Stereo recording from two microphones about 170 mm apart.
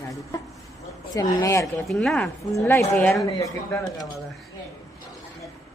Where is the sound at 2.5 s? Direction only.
15° left (ahead or behind).